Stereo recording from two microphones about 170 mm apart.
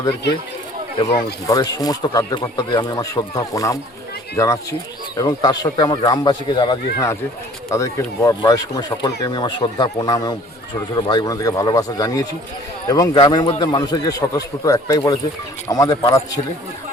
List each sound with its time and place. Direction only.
1.0 s speech: 20° left (ahead or behind)